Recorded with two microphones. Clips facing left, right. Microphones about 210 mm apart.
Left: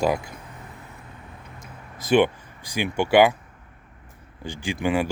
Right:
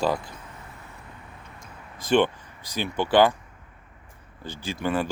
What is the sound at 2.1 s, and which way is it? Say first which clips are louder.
Speech: left 2 dB; 10° left (ahead or behind).